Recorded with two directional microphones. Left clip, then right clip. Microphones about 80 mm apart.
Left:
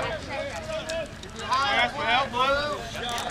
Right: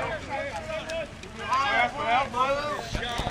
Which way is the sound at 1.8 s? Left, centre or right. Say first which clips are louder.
Left 1 dB; left.